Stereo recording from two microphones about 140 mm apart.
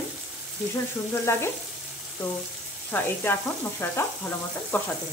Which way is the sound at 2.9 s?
15° left (ahead or behind).